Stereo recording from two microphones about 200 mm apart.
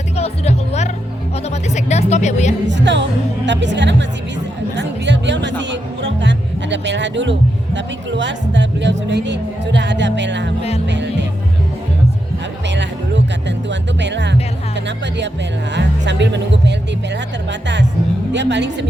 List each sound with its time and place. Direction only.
0.2 s speech: 35° left (ahead or behind)
2.6 s speech: 60° right (ahead or behind)
12.6 s speech: 60° right (ahead or behind)
18.3 s speech: 60° right (ahead or behind)